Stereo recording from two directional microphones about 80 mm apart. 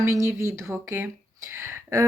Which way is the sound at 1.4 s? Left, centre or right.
Right.